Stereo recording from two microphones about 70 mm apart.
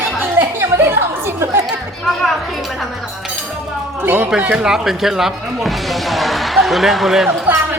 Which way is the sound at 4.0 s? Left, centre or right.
Right.